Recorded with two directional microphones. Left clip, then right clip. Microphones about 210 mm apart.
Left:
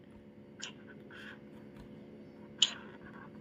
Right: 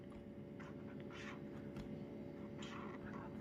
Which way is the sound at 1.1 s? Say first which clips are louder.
Left 4 dB; 10° right (ahead or behind).